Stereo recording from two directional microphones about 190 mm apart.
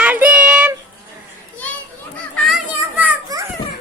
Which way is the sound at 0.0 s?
10° right (ahead or behind).